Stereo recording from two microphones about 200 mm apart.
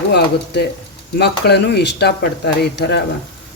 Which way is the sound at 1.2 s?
55° left (ahead or behind).